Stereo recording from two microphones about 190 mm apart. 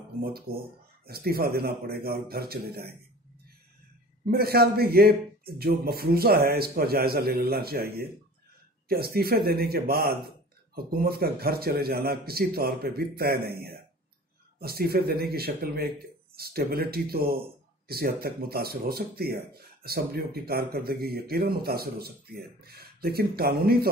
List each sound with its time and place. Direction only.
0.2 s speech: 55° right (ahead or behind)
4.3 s speech: 55° right (ahead or behind)